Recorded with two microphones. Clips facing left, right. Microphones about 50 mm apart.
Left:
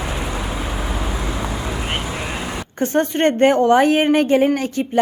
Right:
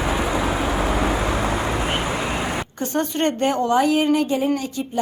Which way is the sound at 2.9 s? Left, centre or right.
Left.